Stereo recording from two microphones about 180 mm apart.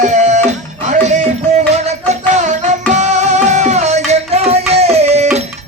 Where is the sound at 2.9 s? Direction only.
40° right (ahead or behind).